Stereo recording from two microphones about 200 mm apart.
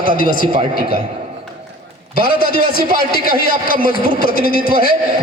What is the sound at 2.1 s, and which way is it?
A man's voice, 50° left (ahead or behind).